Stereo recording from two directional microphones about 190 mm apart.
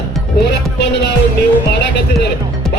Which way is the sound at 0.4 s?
60° left (ahead or behind).